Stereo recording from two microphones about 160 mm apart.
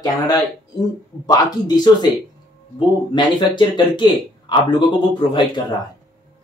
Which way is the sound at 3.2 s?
30° left (ahead or behind).